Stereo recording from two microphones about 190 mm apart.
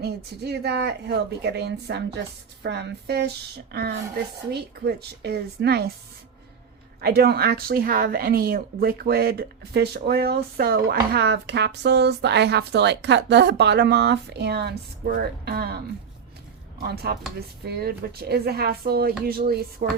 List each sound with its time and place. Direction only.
0.0 s a woman's voice: 60° right (ahead or behind)
7.0 s a woman's voice: 55° right (ahead or behind)